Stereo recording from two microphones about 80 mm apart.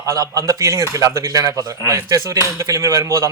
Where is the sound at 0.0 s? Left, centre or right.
Right.